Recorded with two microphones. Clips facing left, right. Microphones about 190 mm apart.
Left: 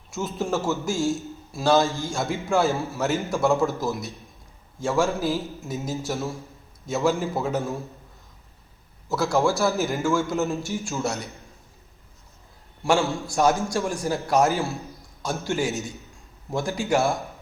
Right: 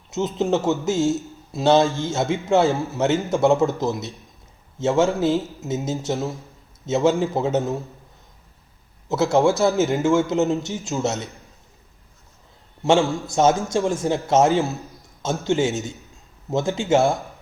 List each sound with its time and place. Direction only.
0.1 s a man's voice: 20° right (ahead or behind)
1.8 s a man's voice: centre (ahead or behind)
2.0 s a man's voice: 20° right (ahead or behind)
9.0 s a man's voice: 20° right (ahead or behind)
12.8 s a man's voice: 20° right (ahead or behind)